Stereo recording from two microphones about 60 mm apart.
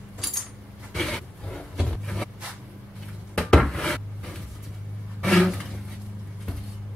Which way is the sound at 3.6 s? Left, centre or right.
Centre.